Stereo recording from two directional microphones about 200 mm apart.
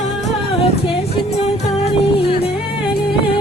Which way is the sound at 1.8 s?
30° left (ahead or behind).